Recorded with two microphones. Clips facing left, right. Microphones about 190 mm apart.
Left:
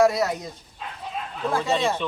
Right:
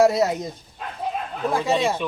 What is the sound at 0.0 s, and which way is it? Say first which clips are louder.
Speech: right 2 dB; 25° right (ahead or behind).